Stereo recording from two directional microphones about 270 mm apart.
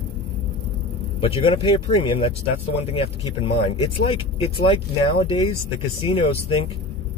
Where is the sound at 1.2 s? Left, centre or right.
Centre.